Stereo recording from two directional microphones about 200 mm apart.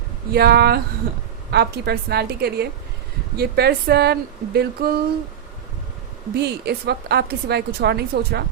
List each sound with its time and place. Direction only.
0.3 s speech: 50° right (ahead or behind)
6.3 s a woman's voice: 55° right (ahead or behind)